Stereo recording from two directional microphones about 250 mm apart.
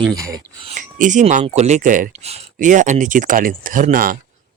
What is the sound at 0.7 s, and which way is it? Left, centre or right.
Speech, right.